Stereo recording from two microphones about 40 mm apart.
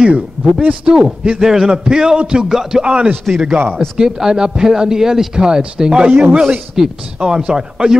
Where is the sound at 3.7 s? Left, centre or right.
Centre.